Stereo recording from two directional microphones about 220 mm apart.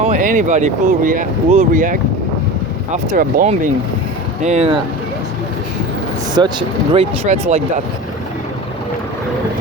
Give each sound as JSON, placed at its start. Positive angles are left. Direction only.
{"t": 0.0, "sound": "speech", "side_deg": -35}
{"t": 6.3, "sound": "speech", "side_deg": -20}